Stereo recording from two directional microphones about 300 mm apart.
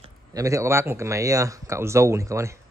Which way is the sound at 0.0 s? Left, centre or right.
Centre.